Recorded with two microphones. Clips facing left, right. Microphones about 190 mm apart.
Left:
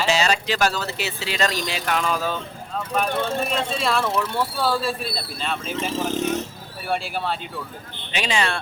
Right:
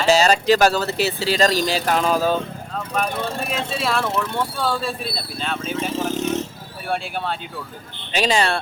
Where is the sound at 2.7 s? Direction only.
Centre (ahead or behind).